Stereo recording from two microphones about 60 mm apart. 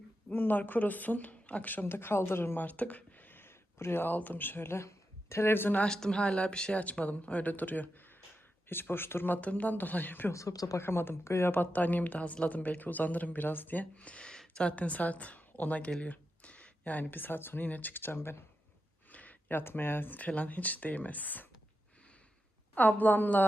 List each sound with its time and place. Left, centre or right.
0.3 s speech: left
2.6 s speech: left
5.8 s speech: centre; by 10.3 s left
10.3 s speech: left
10.8 s speech: left
11.5 s speech: left
14.3 s a sound: centre
14.7 s speech: left
19.1 s speech: left
22.7 s speech: left